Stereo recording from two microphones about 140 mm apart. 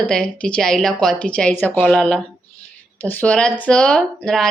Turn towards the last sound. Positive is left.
turn(degrees=5)  # may be behind; listen again after turning